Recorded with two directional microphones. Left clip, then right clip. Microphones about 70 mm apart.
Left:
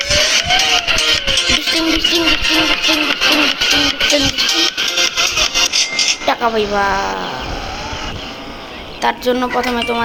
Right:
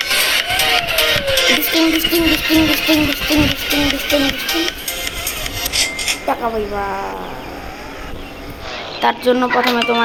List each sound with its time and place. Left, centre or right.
0.0 s music: right
4.9 s music: right
6.2 s a sound: centre
6.8 s speech: centre
9.0 s speech: centre